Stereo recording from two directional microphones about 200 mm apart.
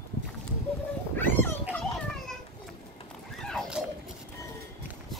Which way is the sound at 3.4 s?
Centre (ahead or behind).